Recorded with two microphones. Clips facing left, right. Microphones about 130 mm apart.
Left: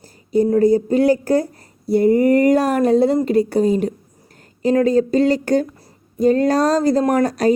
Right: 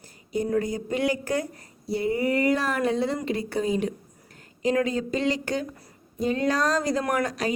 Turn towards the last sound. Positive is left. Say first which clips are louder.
# left 9 dB
turn(degrees=40)  # may be behind; listen again after turning